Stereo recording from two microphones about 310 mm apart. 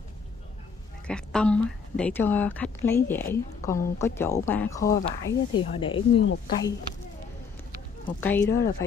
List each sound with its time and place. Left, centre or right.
1.0 s speech: centre
6.2 s speech: left
8.2 s speech: centre